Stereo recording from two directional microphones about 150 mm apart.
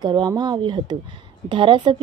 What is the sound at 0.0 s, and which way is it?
Speech, 30° right (ahead or behind).